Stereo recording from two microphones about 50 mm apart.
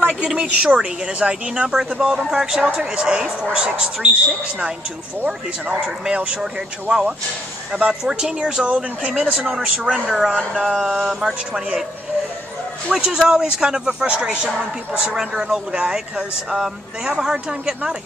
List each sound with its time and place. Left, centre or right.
0.2 s speech: centre
0.6 s a man's voice: centre
5.2 s a man's voice: right
10.0 s a man's voice: centre
12.9 s a man's voice: centre